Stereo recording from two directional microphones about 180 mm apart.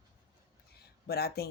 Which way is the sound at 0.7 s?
60° left (ahead or behind).